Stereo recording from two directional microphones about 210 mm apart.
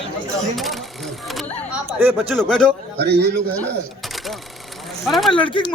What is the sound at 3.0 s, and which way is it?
Speech, 50° right (ahead or behind).